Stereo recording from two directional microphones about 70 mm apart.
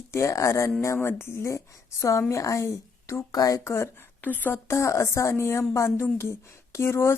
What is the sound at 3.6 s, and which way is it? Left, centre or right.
Speech, left.